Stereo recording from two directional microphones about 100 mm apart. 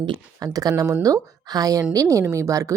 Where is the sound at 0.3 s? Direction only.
40° right (ahead or behind).